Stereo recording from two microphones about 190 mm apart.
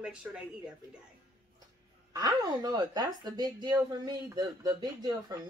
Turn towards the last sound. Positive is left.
turn(degrees=-20)  # may be behind; listen again after turning